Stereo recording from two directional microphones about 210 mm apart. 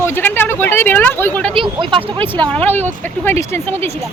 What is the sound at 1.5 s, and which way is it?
Speech, 25° right (ahead or behind).